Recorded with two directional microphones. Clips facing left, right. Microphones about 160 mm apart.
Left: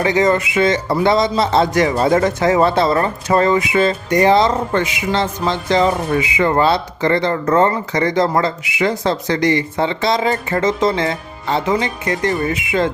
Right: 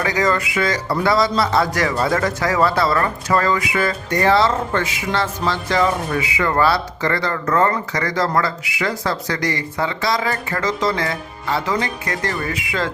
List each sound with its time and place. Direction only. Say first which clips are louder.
0.0 s speech: left 4 dB; 25° left (ahead or behind)